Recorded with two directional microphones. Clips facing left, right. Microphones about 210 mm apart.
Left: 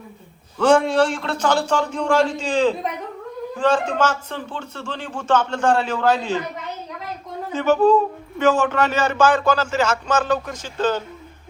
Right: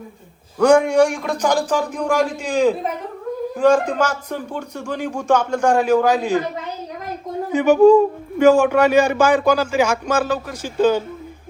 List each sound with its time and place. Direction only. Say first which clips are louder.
0.6 s speech: right 3 dB; 10° right (ahead or behind)
7.5 s speech: right 5 dB; 15° right (ahead or behind)